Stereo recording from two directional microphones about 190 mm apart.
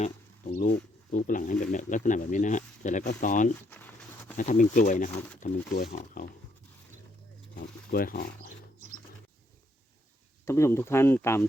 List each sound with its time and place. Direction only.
0.0 s speech: 45° left (ahead or behind)
3.7 s a sound: 10° left (ahead or behind)
4.4 s speech: 45° left (ahead or behind)
5.7 s speech: 55° left (ahead or behind)
7.5 s speech: 50° left (ahead or behind)
10.4 s speech: 15° left (ahead or behind)